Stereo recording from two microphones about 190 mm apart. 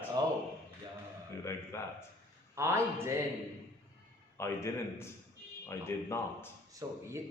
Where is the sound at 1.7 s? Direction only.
15° left (ahead or behind).